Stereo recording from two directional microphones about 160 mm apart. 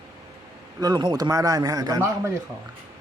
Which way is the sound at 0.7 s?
25° right (ahead or behind).